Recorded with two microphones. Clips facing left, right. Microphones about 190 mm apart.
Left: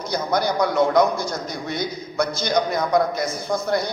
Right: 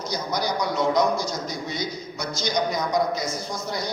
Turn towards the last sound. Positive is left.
turn(degrees=55)  # may be behind; listen again after turning